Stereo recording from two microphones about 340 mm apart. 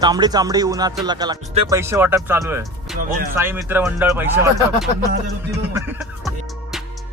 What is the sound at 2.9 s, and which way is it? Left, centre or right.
Speech, right.